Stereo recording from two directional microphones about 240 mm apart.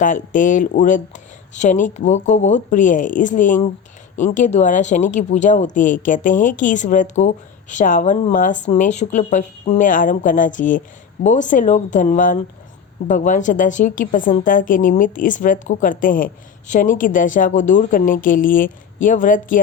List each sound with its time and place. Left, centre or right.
0.0 s speech: left